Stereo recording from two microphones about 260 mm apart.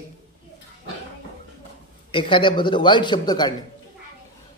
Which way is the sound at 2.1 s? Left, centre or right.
Centre.